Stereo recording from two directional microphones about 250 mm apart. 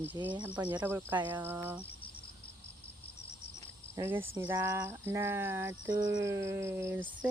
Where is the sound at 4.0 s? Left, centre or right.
Centre.